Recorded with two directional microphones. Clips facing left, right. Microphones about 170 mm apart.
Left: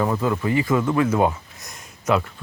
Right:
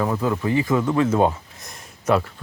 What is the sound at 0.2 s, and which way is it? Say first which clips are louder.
Speech: even; 20° right (ahead or behind).